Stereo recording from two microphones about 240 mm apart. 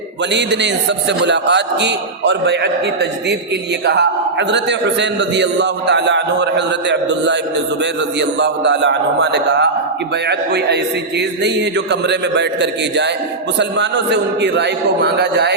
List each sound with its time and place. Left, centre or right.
0.3 s a man's voice: right